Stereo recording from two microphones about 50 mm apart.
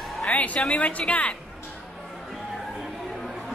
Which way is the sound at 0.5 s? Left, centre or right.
Left.